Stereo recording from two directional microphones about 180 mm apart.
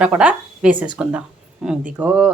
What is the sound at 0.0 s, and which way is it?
Speech, 5° right (ahead or behind).